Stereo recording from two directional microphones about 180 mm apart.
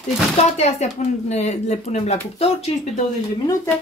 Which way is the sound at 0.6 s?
35° left (ahead or behind).